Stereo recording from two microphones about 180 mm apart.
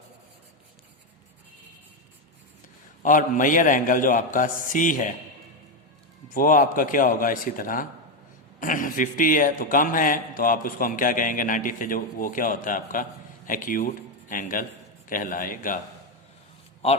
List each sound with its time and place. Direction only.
3.0 s speech: 45° left (ahead or behind)
6.2 s speech: 50° left (ahead or behind)